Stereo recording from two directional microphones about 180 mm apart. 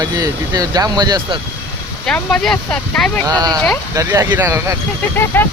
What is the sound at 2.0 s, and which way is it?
Speech, 5° left (ahead or behind).